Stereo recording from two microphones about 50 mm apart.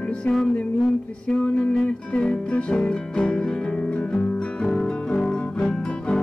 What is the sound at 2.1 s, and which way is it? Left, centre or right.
Music, left.